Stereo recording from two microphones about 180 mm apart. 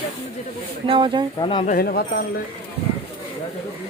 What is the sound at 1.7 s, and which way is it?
Speech, 55° left (ahead or behind).